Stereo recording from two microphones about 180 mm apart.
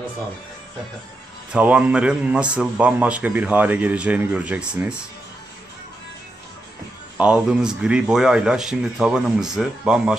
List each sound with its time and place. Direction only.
1.5 s a man's voice: 5° right (ahead or behind)
7.2 s a man's voice: 5° right (ahead or behind)